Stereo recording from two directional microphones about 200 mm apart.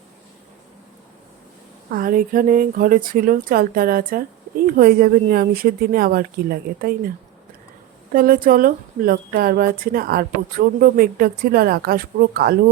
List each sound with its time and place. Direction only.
1.9 s speech: 45° right (ahead or behind)
8.1 s speech: 45° right (ahead or behind)